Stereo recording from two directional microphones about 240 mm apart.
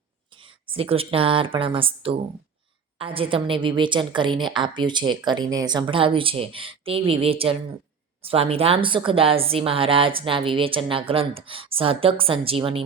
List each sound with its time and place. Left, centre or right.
0.3 s a woman's voice: right